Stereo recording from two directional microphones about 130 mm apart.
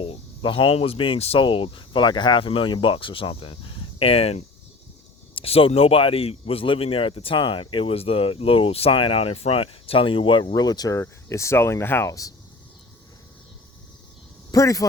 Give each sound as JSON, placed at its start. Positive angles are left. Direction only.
{"t": 0.0, "sound": "speech", "side_deg": 45}
{"t": 14.5, "sound": "a man's voice", "side_deg": 25}